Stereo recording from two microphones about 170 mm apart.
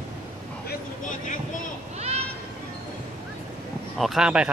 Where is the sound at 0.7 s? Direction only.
50° left (ahead or behind).